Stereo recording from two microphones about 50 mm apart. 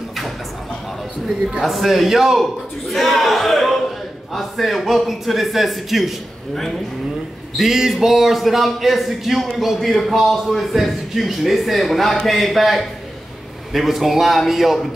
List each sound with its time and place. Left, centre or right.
1.6 s a man's voice: centre
7.5 s a man's voice: centre